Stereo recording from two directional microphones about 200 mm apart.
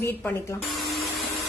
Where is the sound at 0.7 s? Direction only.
Centre (ahead or behind).